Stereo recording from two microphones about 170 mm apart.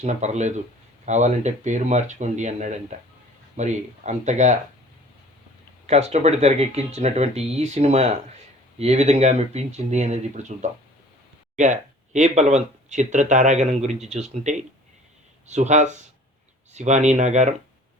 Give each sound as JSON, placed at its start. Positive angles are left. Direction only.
{"t": 0.0, "sound": "speech", "side_deg": -40}
{"t": 5.8, "sound": "speech", "side_deg": -40}